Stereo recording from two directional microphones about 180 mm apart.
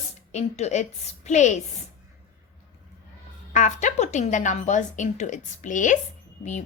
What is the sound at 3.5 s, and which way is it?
A woman's voice, 40° left (ahead or behind).